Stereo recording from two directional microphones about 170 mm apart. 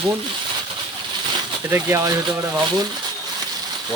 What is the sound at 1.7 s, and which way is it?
Speech, 15° right (ahead or behind).